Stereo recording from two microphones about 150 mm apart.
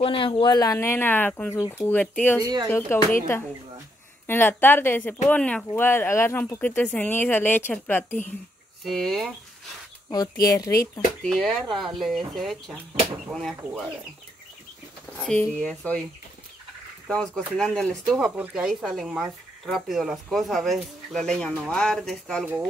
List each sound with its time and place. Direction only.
0.0 s speech: 35° left (ahead or behind); by 2.4 s 10° left (ahead or behind)
2.4 s speech: 25° right (ahead or behind)
2.7 s speech: 15° left (ahead or behind)
4.3 s speech: 15° left (ahead or behind)
10.1 s speech: 25° left (ahead or behind)
11.2 s speech: 5° left (ahead or behind)
15.2 s speech: 5° left (ahead or behind)
17.1 s speech: 5° left (ahead or behind)
18.1 s speech: 5° right (ahead or behind)